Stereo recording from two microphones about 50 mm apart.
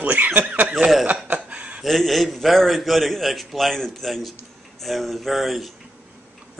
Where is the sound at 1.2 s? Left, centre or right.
Right.